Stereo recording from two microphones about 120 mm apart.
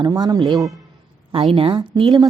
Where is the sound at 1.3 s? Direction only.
50° right (ahead or behind).